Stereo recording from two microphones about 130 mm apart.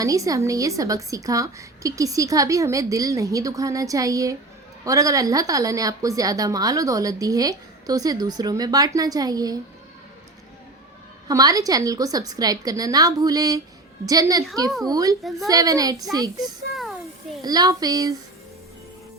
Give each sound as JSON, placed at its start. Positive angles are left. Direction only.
{"t": 0.0, "sound": "a woman's voice", "side_deg": -25}
{"t": 11.3, "sound": "a woman's voice", "side_deg": -30}
{"t": 15.2, "sound": "a woman's voice", "side_deg": 0}
{"t": 15.4, "sound": "a woman's voice", "side_deg": -25}
{"t": 16.4, "sound": "speech", "side_deg": 0}
{"t": 17.4, "sound": "a woman's voice", "side_deg": -30}